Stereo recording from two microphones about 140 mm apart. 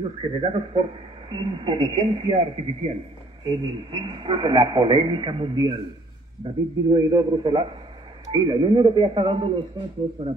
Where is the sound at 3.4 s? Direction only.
35° right (ahead or behind).